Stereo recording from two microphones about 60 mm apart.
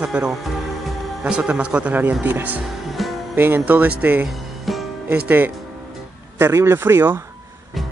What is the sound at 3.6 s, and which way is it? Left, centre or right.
Speech, right.